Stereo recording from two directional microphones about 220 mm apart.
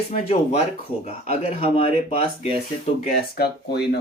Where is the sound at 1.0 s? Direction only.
30° left (ahead or behind).